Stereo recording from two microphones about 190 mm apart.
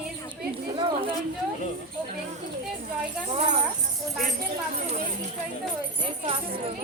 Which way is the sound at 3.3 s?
30° right (ahead or behind).